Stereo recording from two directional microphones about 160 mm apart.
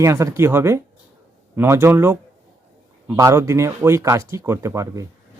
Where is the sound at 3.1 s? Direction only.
20° right (ahead or behind).